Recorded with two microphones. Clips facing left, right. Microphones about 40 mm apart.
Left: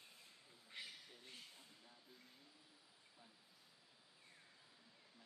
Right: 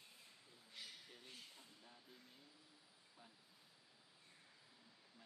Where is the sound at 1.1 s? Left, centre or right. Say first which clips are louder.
Even; centre.